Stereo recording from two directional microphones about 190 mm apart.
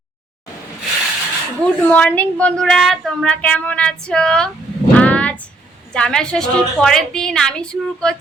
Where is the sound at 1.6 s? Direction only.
5° left (ahead or behind).